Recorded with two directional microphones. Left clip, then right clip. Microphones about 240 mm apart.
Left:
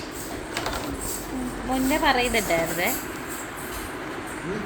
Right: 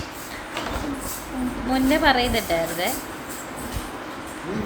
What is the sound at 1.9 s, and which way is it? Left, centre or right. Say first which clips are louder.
Speech: right 2 dB; centre.